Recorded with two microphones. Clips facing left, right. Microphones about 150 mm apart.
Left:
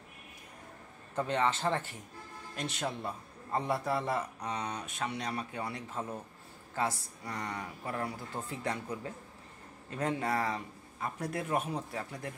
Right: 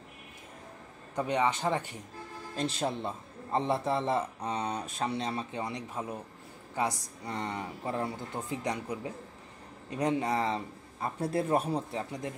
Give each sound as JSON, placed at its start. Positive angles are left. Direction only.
{"t": 1.1, "sound": "speech", "side_deg": -15}
{"t": 2.5, "sound": "a man's voice", "side_deg": -30}
{"t": 11.9, "sound": "a man's voice", "side_deg": -20}